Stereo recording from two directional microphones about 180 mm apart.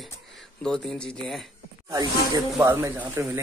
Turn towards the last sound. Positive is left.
turn(degrees=-10)  # may be behind; listen again after turning